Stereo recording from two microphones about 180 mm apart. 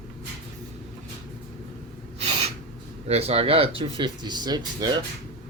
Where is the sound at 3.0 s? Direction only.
35° right (ahead or behind).